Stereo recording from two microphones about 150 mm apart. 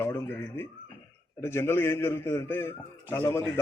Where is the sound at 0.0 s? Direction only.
15° left (ahead or behind).